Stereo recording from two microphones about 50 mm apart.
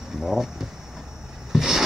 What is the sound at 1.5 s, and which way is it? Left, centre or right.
Vehicle, centre.